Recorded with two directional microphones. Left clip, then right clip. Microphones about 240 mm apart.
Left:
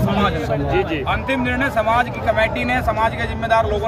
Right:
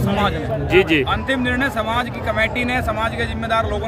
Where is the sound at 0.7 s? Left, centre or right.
Right.